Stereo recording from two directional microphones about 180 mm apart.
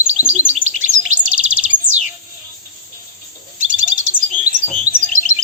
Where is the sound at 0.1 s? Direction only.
40° right (ahead or behind).